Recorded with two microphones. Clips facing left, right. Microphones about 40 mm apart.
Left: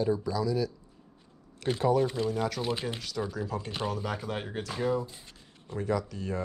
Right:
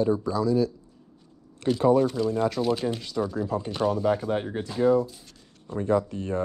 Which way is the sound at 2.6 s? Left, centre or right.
Right.